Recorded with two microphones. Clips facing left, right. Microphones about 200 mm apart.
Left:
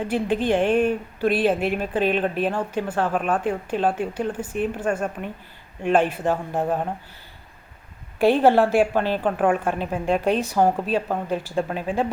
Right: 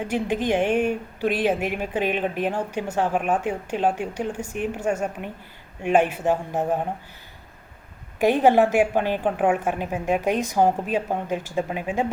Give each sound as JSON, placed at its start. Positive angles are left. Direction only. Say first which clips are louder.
{"t": 0.1, "sound": "speech", "louder": "left 1 dB", "side_deg": -10}
{"t": 8.4, "sound": "speech", "louder": "right 1 dB", "side_deg": -15}